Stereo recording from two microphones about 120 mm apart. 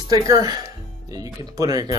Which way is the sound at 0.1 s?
30° right (ahead or behind).